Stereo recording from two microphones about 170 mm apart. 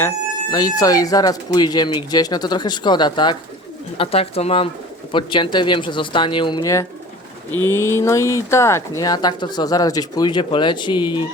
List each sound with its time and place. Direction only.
0.5 s speech: 20° left (ahead or behind)